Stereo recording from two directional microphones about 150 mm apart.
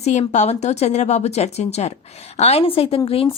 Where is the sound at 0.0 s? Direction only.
50° left (ahead or behind).